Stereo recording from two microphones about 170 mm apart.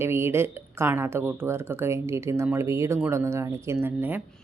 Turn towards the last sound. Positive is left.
turn(degrees=-10)  # may be behind; listen again after turning